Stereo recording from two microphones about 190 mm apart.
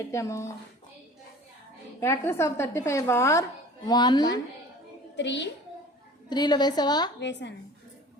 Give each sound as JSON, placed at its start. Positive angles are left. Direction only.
{"t": 0.0, "sound": "a woman's voice", "side_deg": 15}
{"t": 2.0, "sound": "a woman's voice", "side_deg": 15}
{"t": 5.1, "sound": "a child's voice", "side_deg": 65}
{"t": 6.2, "sound": "a woman's voice", "side_deg": 20}
{"t": 7.2, "sound": "a child's voice", "side_deg": 65}